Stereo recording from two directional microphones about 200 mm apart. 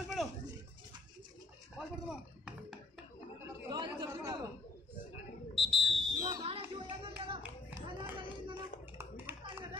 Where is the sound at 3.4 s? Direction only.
15° right (ahead or behind).